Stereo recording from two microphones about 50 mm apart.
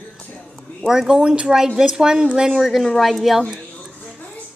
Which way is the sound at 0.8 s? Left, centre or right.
Centre.